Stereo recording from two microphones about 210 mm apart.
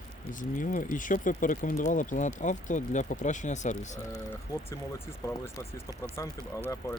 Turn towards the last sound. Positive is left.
turn(degrees=15)  # may be behind; listen again after turning